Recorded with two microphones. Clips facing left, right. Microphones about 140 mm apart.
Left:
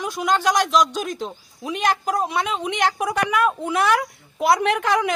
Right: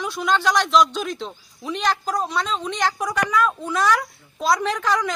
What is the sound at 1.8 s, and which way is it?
A woman's voice, 50° left (ahead or behind).